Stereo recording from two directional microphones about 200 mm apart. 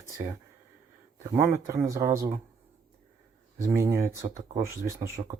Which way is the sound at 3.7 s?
10° right (ahead or behind).